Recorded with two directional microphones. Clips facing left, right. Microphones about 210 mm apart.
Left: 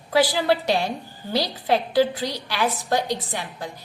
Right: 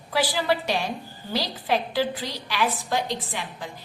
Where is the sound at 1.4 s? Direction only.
45° left (ahead or behind).